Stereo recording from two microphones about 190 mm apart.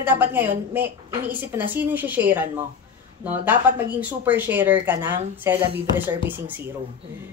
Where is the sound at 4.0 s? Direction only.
10° right (ahead or behind).